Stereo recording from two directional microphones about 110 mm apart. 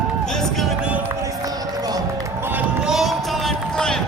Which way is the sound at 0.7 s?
10° right (ahead or behind).